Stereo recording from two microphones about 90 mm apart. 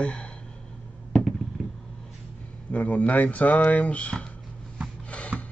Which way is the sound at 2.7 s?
15° left (ahead or behind).